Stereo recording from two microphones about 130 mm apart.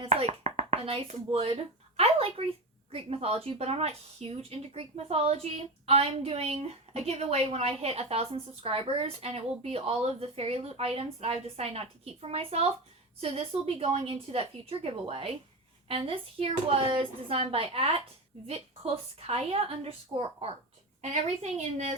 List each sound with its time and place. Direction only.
0.0 s a sound: 50° right (ahead or behind)
2.0 s speech: 50° right (ahead or behind)
19.3 s speech: 50° right (ahead or behind)
21.0 s a woman's voice: 60° right (ahead or behind)